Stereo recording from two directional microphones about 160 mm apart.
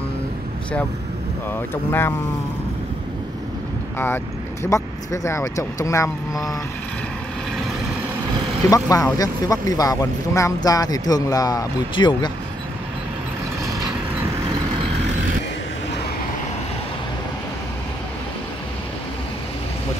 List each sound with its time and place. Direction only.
1.5 s speech: 15° left (ahead or behind)
4.6 s speech: 20° left (ahead or behind)
8.6 s speech: 20° left (ahead or behind)